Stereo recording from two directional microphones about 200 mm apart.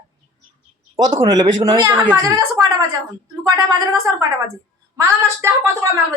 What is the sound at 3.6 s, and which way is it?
Speech, 15° right (ahead or behind).